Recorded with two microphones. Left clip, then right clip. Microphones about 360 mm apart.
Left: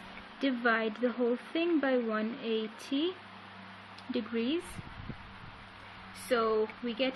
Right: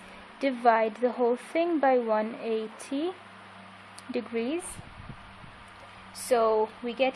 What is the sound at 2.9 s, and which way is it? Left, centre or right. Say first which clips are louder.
Speech: right 1 dB; right.